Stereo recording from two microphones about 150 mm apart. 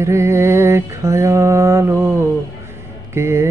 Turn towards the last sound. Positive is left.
turn(degrees=-15)  # may be behind; listen again after turning